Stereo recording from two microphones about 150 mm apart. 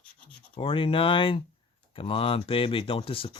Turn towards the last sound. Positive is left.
turn(degrees=35)  # may be behind; listen again after turning